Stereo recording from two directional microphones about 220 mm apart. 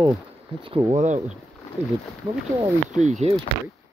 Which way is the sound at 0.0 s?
25° right (ahead or behind).